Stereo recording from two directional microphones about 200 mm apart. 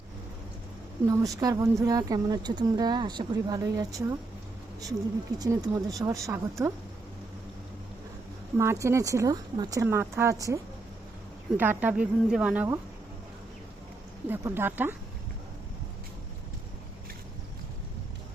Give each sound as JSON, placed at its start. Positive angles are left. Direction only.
{"t": 1.0, "sound": "speech", "side_deg": -15}
{"t": 5.4, "sound": "speech", "side_deg": -15}
{"t": 8.5, "sound": "speech", "side_deg": -15}
{"t": 14.3, "sound": "speech", "side_deg": -10}